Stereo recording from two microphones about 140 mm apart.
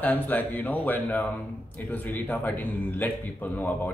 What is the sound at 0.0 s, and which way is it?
A man's voice, 10° left (ahead or behind).